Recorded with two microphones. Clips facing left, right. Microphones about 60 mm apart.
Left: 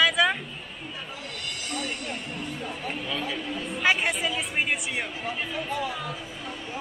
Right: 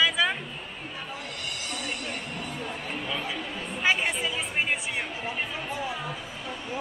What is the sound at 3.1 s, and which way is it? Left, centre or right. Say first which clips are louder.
Speech: left 1 dB; centre.